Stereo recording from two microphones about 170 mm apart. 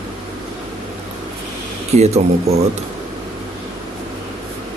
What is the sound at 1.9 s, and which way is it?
Speech, 40° right (ahead or behind).